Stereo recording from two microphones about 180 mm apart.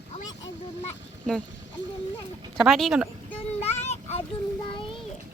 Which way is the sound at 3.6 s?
35° left (ahead or behind).